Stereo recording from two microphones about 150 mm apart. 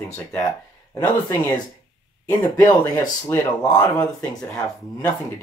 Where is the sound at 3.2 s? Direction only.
15° left (ahead or behind).